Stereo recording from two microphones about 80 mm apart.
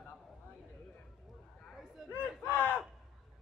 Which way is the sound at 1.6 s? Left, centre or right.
Centre.